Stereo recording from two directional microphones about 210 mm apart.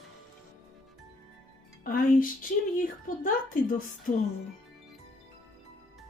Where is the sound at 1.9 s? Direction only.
40° left (ahead or behind).